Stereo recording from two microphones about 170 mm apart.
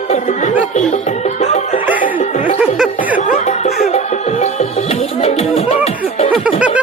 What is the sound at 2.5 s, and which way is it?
Music, 5° right (ahead or behind).